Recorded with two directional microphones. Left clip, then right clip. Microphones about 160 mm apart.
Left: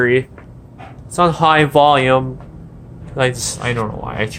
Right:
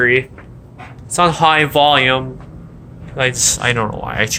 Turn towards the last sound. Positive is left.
turn(degrees=10)  # may be behind; listen again after turning